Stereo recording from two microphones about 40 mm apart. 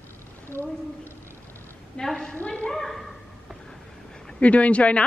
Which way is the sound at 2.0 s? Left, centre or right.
Centre.